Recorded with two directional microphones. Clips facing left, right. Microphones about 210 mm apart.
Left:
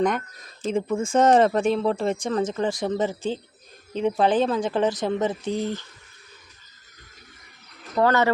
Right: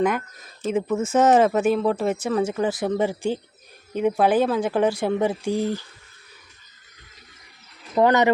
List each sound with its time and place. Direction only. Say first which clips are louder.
0.0 s speech: right 1 dB; 5° right (ahead or behind)
7.9 s speech: right 2 dB; 15° right (ahead or behind)